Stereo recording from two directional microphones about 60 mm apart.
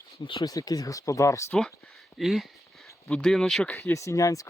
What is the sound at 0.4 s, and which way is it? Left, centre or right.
Speech, left.